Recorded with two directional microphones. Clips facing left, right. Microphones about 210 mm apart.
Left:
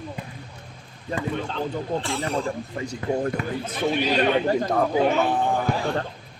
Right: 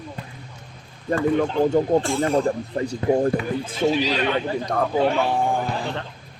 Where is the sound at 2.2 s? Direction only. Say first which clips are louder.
Right 6 dB; 50° right (ahead or behind).